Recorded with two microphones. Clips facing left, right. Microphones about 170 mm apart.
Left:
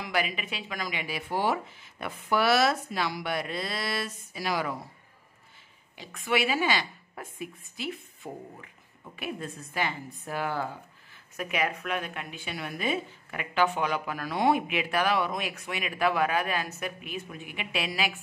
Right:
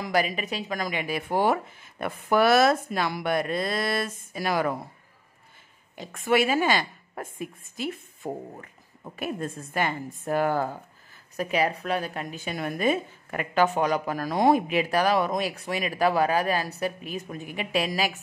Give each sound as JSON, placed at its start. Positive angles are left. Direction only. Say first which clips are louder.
{"t": 0.0, "sound": "speech", "louder": "right 5 dB", "side_deg": -40}
{"t": 5.9, "sound": "speech", "louder": "right 5 dB", "side_deg": -45}
{"t": 11.3, "sound": "a woman's voice", "louder": "right 5 dB", "side_deg": -35}